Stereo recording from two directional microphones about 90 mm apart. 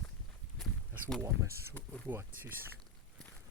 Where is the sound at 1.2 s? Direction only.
30° right (ahead or behind).